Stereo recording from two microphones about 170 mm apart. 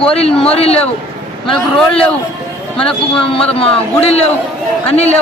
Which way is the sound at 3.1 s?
35° left (ahead or behind).